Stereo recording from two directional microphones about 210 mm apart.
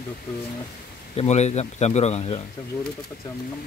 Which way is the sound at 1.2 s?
30° left (ahead or behind).